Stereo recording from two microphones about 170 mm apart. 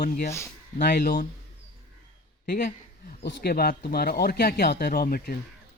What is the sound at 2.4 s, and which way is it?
Speech, 55° left (ahead or behind).